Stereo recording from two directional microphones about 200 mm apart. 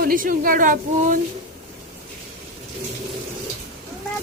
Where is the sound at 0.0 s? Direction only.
45° right (ahead or behind).